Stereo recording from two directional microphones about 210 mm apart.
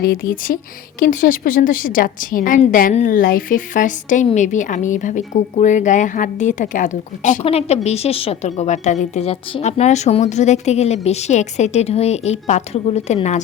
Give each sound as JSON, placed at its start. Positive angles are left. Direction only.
{"t": 0.1, "sound": "speech", "side_deg": 40}